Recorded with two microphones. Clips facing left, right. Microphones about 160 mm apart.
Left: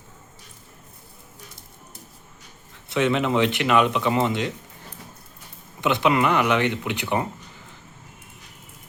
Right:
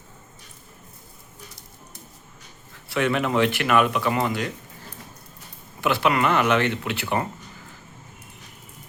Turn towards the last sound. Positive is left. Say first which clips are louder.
# left 1 dB
turn(degrees=15)  # may be behind; listen again after turning